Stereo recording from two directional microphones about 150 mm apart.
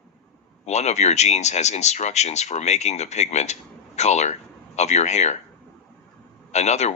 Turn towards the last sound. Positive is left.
turn(degrees=50)  # may be behind; listen again after turning